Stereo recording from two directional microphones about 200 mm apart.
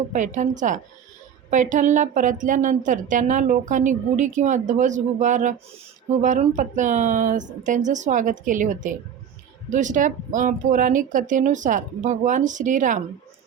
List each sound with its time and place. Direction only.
0.1 s a woman's voice: 40° right (ahead or behind)